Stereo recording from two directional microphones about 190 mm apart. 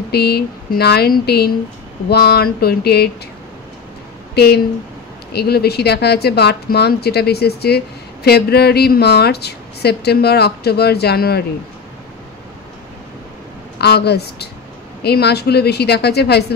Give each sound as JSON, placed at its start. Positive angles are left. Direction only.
{"t": 0.1, "sound": "speech", "side_deg": 60}
{"t": 5.3, "sound": "speech", "side_deg": 55}
{"t": 13.7, "sound": "speech", "side_deg": 60}